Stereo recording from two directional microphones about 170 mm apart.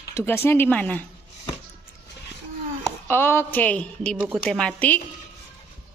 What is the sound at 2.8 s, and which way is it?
A woman's voice, 10° left (ahead or behind).